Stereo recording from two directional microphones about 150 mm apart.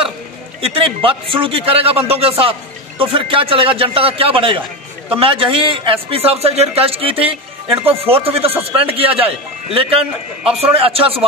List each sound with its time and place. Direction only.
0.6 s a man's voice: 40° right (ahead or behind)